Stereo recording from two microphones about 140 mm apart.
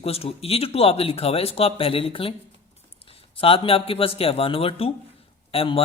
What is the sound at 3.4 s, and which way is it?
A woman's voice, 40° left (ahead or behind).